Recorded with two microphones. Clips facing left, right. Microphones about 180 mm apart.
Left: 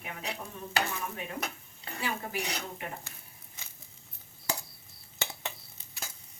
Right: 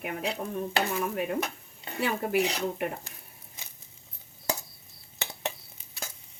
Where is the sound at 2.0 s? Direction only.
60° right (ahead or behind).